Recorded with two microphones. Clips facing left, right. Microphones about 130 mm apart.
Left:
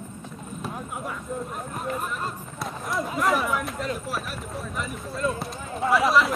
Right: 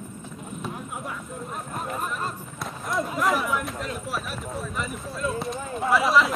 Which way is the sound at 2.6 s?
Centre (ahead or behind).